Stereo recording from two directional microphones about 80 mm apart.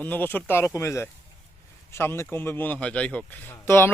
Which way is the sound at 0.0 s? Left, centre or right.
Left.